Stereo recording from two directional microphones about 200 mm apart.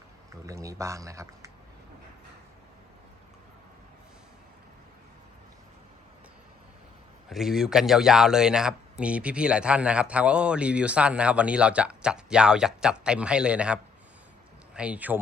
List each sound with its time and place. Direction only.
0.4 s speech: 15° right (ahead or behind)
7.3 s speech: centre (ahead or behind)